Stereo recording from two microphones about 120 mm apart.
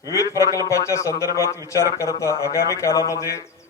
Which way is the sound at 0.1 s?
25° left (ahead or behind).